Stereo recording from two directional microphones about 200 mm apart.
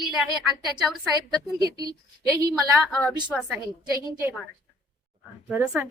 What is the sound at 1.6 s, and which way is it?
Speech, 20° right (ahead or behind).